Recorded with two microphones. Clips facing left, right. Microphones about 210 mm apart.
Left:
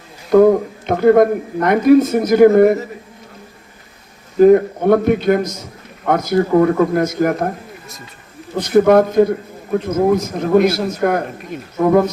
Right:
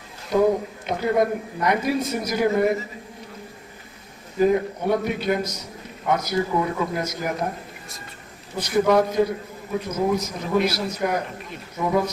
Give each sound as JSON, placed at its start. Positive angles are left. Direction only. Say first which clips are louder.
{"t": 0.3, "sound": "speech", "louder": "left 9 dB", "side_deg": 55}
{"t": 4.4, "sound": "a man's voice", "louder": "left 10 dB", "side_deg": 55}
{"t": 8.5, "sound": "speech", "louder": "left 8 dB", "side_deg": 55}